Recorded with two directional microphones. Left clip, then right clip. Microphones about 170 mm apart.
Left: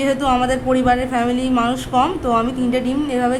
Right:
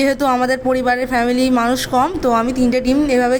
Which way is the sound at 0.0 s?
30° right (ahead or behind).